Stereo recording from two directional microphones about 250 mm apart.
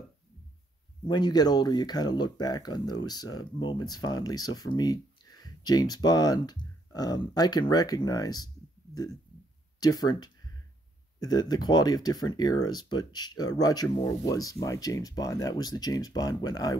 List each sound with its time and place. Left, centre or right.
1.0 s speech: centre
9.8 s speech: centre